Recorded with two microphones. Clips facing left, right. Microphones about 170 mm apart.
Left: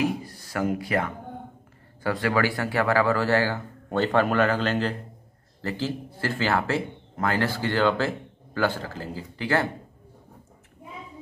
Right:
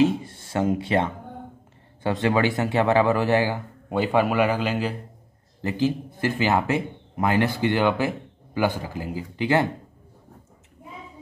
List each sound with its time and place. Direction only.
0.0 s speech: 25° right (ahead or behind)